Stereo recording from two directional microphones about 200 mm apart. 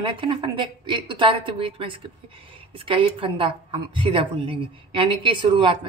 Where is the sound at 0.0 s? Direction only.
25° right (ahead or behind).